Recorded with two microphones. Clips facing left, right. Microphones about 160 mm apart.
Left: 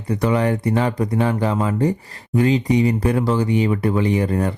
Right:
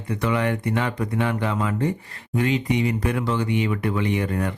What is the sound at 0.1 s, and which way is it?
Speech, 35° left (ahead or behind).